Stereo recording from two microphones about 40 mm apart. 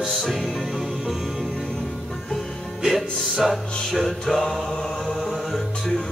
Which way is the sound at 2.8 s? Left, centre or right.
Centre.